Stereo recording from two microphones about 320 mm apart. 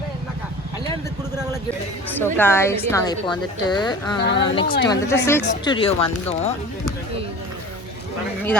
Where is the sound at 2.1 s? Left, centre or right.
Centre.